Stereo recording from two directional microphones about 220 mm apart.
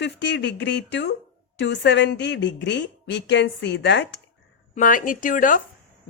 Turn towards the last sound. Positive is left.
turn(degrees=35)  # may be behind; listen again after turning